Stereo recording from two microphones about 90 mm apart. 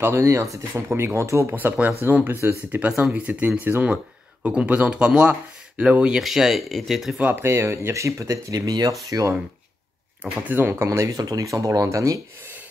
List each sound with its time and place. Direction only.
0.0 s speech: 30° right (ahead or behind)
1.5 s speech: 20° right (ahead or behind); by 7.2 s centre (ahead or behind)
7.2 s speech: 20° right (ahead or behind)
7.4 s speech: 30° right (ahead or behind); by 8.9 s 45° right (ahead or behind)
10.5 s speech: 25° right (ahead or behind)